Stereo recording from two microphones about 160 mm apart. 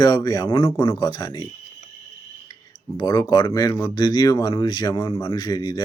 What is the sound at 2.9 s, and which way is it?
Speech, 25° left (ahead or behind).